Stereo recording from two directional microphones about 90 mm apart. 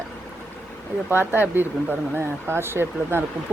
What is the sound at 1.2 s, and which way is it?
Speech, 20° right (ahead or behind).